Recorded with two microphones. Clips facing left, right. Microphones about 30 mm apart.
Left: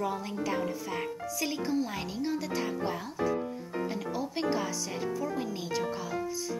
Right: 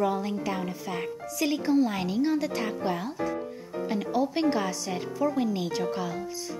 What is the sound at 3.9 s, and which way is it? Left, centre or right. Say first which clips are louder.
A woman's voice: right 7 dB; centre.